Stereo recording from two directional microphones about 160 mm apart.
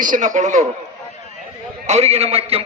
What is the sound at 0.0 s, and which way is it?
Speech, 55° right (ahead or behind).